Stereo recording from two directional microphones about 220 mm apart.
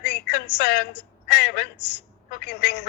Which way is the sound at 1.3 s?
45° left (ahead or behind).